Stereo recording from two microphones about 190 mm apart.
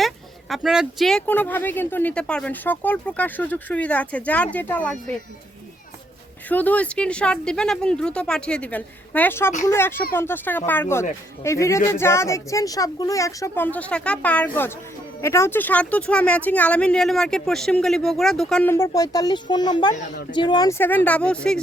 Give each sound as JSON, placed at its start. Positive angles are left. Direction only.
{"t": 0.0, "sound": "speech", "side_deg": 0}
{"t": 6.5, "sound": "speech", "side_deg": 10}